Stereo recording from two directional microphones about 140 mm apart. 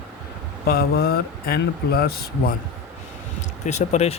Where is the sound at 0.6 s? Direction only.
90° left.